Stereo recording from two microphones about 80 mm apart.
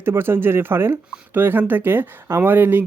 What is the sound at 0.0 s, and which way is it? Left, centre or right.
Speech, right.